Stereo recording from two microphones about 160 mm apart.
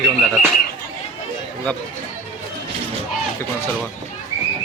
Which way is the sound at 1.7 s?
5° left (ahead or behind).